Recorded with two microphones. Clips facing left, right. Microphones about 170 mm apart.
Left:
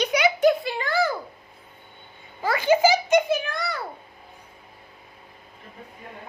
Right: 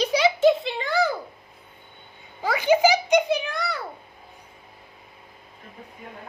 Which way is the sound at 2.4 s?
15° right (ahead or behind).